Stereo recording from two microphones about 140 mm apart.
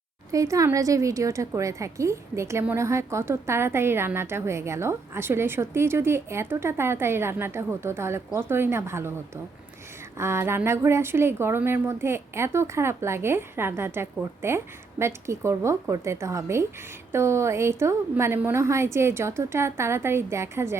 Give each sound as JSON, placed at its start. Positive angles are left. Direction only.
{"t": 0.3, "sound": "a woman's voice", "side_deg": -25}
{"t": 10.2, "sound": "a woman's voice", "side_deg": -20}